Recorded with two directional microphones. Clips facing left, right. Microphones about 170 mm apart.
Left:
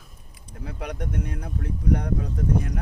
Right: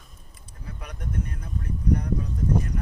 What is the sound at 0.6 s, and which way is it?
Speech, 75° left (ahead or behind).